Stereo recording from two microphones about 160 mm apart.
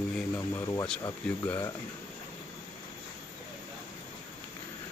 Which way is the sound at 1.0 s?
15° left (ahead or behind).